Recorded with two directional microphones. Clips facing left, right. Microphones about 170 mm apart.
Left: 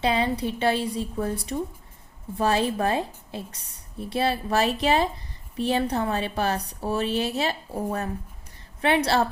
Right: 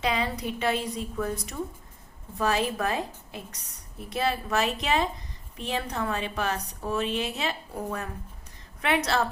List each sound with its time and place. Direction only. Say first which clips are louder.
0.0 s a woman's voice: left 4 dB; 30° left (ahead or behind)